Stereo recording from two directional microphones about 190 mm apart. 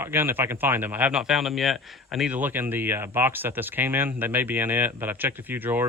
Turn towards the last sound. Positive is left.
turn(degrees=-10)  # may be behind; listen again after turning